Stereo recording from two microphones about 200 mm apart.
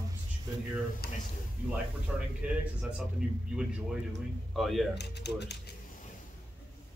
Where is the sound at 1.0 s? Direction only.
55° left (ahead or behind).